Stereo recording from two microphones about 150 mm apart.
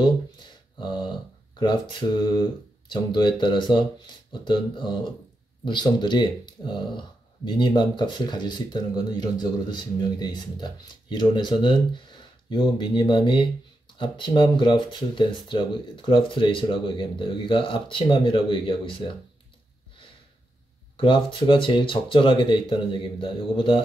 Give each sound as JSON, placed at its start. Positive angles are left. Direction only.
{"t": 0.7, "sound": "a sound", "side_deg": 30}
{"t": 1.6, "sound": "speech", "side_deg": 30}
{"t": 21.0, "sound": "speech", "side_deg": 35}